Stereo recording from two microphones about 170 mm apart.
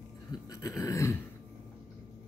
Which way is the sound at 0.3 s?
20° left (ahead or behind).